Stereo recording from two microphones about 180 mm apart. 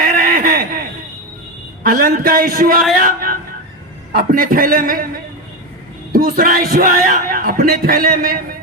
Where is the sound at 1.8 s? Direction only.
55° right (ahead or behind).